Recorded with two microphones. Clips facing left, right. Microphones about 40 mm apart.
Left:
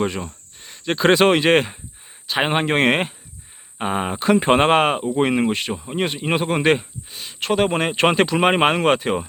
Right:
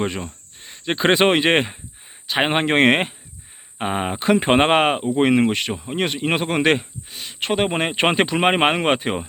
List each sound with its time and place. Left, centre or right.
0.6 s speech: right
3.8 s speech: right
4.2 s speech: right